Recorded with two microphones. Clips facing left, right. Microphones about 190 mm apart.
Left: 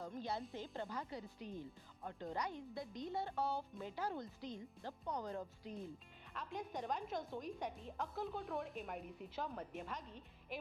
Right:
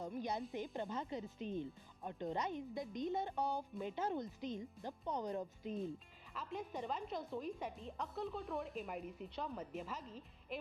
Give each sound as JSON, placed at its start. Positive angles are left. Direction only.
{"t": 0.1, "sound": "speech", "side_deg": -15}
{"t": 6.3, "sound": "a woman's voice", "side_deg": 0}